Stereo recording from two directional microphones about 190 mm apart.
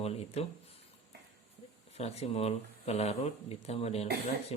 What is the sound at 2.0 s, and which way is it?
Speech, 35° left (ahead or behind).